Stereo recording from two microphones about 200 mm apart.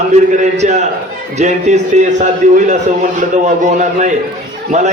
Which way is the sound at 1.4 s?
35° right (ahead or behind).